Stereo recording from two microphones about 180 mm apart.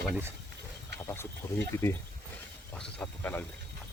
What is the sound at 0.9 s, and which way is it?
Speech, 15° left (ahead or behind).